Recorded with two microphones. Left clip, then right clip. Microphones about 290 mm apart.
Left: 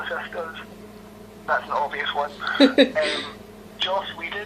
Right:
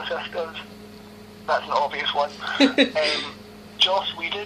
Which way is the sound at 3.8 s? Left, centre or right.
Right.